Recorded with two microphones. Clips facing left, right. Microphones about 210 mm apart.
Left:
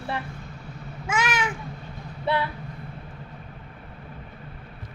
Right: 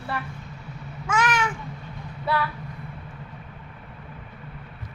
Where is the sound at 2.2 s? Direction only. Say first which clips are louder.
Left 1 dB; 25° left (ahead or behind).